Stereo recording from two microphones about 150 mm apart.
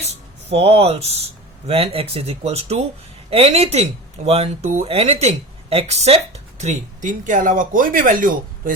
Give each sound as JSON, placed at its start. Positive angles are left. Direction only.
{"t": 0.0, "sound": "speech", "side_deg": -45}